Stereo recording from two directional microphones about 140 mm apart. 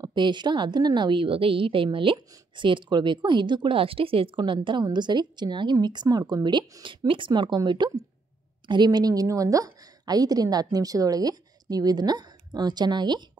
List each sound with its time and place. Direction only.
0.0 s a woman's voice: 35° right (ahead or behind)